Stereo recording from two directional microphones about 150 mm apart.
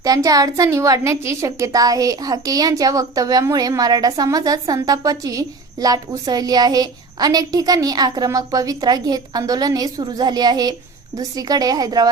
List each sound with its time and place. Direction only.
0.0 s a woman's voice: 25° right (ahead or behind)